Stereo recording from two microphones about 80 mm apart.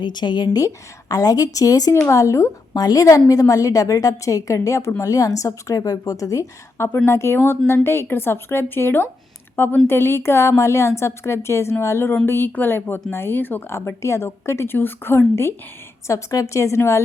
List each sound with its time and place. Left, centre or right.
0.0 s speech: left
0.5 s a woman's voice: left
2.7 s a woman's voice: left
6.8 s speech: left
16.0 s speech: left